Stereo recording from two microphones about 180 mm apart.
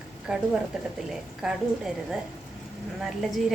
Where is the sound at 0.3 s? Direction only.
5° right (ahead or behind).